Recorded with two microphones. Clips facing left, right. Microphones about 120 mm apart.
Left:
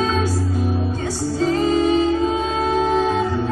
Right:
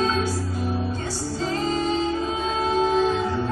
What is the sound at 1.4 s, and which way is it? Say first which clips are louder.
Music: left 8 dB; 55° left (ahead or behind).